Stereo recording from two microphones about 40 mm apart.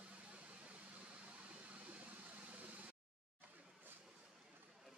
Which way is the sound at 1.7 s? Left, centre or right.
Right.